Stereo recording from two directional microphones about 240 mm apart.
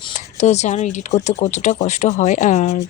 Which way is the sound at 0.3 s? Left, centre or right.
Left.